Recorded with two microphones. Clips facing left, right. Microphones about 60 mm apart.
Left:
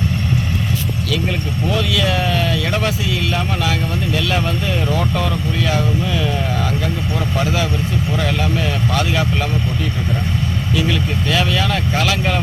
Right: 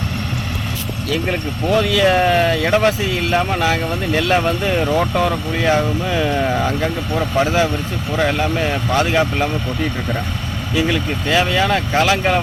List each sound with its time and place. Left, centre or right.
1.1 s speech: right
2.6 s speech: right
4.9 s speech: right
10.8 s speech: centre